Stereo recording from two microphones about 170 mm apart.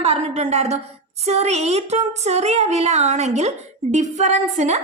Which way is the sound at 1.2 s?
40° right (ahead or behind).